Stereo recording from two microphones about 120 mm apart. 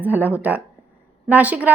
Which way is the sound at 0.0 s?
15° right (ahead or behind).